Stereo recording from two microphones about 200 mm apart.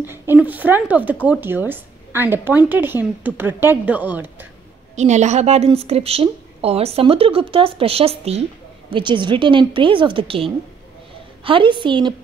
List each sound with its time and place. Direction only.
0.0 s a woman's voice: 10° right (ahead or behind)
4.9 s a woman's voice: 35° right (ahead or behind)